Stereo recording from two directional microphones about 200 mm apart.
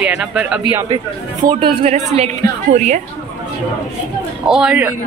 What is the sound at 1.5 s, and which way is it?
A woman's voice, 25° right (ahead or behind).